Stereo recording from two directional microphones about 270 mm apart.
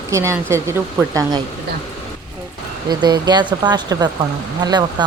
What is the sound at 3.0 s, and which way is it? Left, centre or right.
Speech, centre.